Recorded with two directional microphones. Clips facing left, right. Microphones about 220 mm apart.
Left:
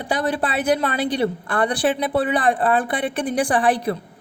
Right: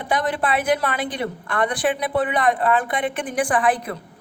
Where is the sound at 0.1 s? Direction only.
30° left (ahead or behind).